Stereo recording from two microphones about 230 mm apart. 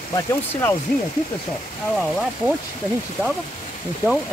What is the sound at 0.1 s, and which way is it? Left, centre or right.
Speech, centre.